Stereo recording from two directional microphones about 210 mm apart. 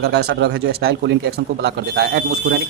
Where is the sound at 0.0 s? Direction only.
50° right (ahead or behind).